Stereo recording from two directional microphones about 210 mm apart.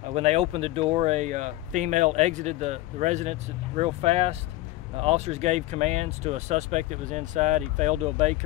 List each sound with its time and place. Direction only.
0.0 s speech: 30° right (ahead or behind)